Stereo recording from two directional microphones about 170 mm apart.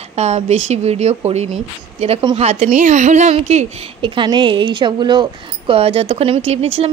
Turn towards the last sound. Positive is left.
turn(degrees=-35)  # may be behind; listen again after turning